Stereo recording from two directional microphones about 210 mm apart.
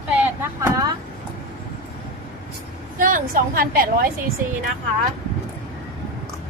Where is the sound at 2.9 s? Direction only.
40° right (ahead or behind).